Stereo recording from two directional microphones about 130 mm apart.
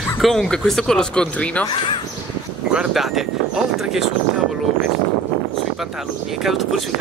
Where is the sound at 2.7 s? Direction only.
5° right (ahead or behind).